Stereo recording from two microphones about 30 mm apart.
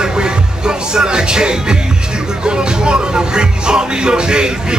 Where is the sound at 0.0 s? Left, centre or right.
Right.